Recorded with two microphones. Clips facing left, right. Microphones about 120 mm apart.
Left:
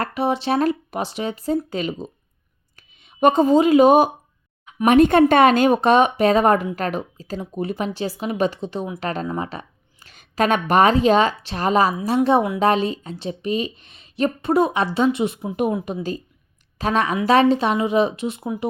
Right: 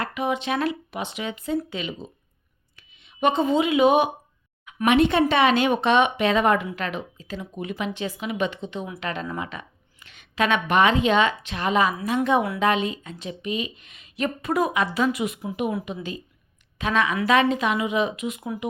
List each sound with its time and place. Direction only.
0.0 s a woman's voice: 35° left (ahead or behind)
15.9 s a woman's voice: 40° left (ahead or behind)